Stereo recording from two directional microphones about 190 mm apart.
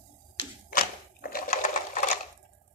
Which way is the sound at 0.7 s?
50° left (ahead or behind).